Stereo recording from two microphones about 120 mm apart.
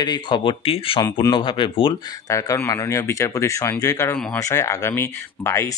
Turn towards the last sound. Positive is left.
turn(degrees=25)  # may be behind; listen again after turning